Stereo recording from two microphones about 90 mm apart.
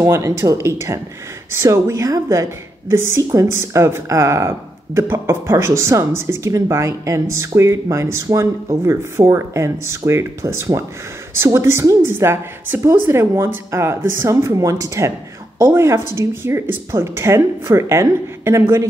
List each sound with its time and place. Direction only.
0.0 s speech: 30° right (ahead or behind)